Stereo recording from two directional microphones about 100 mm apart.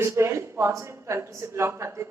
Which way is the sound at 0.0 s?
25° right (ahead or behind).